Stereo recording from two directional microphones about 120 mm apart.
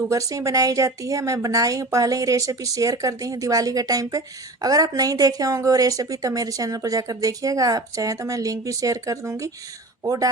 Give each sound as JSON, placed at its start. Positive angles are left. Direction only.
{"t": 0.1, "sound": "speech", "side_deg": -30}